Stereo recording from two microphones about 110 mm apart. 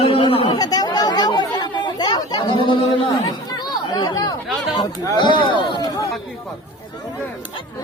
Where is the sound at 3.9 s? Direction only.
40° left (ahead or behind).